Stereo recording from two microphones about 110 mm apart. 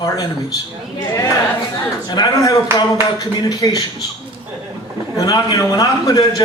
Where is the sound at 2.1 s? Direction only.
40° left (ahead or behind).